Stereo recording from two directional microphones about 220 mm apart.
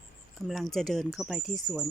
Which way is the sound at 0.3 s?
Centre (ahead or behind).